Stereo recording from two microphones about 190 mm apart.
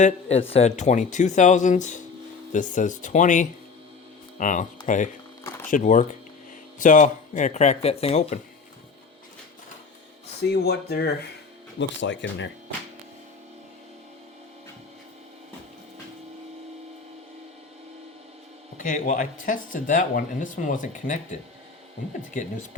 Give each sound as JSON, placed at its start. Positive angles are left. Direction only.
{"t": 0.0, "sound": "speech", "side_deg": 35}
{"t": 5.4, "sound": "a sound", "side_deg": 15}
{"t": 5.6, "sound": "speech", "side_deg": 40}
{"t": 10.4, "sound": "speech", "side_deg": 60}
{"t": 11.8, "sound": "speech", "side_deg": 70}
{"t": 18.8, "sound": "speech", "side_deg": 45}